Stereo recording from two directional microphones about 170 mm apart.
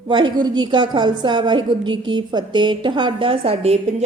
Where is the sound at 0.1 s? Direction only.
25° right (ahead or behind).